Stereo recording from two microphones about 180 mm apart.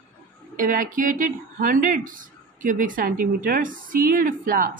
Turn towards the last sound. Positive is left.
turn(degrees=-50)  # may be behind; listen again after turning